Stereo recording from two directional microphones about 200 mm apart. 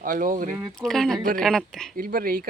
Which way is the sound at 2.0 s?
45° right (ahead or behind).